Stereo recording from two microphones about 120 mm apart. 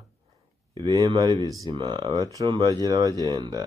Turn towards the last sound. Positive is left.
turn(degrees=-35)  # may be behind; listen again after turning